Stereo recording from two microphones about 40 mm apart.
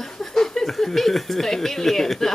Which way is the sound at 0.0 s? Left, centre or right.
Centre.